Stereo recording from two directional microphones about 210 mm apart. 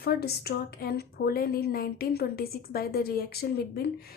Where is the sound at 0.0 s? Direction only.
50° left (ahead or behind).